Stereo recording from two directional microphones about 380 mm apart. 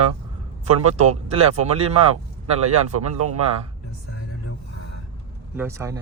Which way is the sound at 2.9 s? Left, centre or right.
Right.